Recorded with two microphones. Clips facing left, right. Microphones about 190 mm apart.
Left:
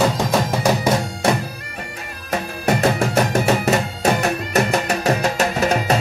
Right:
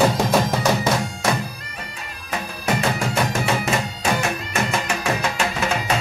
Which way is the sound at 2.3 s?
40° left (ahead or behind).